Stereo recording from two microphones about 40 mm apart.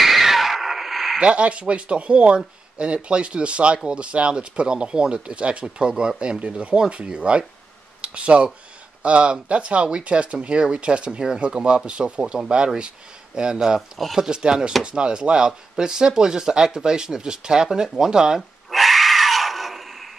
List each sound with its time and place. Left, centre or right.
0.0 s music: centre
1.2 s speech: right
13.7 s speech: centre
14.3 s speech: right
18.7 s gasp: centre